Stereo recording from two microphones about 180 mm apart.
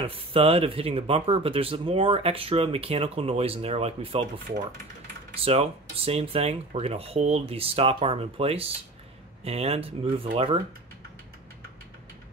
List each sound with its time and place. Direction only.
0.0 s speech: 30° right (ahead or behind)
5.4 s speech: 35° right (ahead or behind)